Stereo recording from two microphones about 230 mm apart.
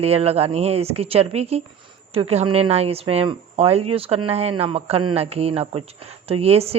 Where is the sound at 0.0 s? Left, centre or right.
Right.